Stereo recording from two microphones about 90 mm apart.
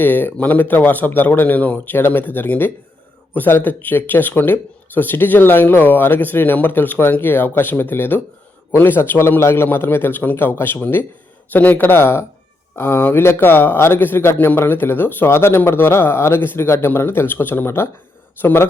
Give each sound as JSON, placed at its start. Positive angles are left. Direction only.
{"t": 0.0, "sound": "speech", "side_deg": 20}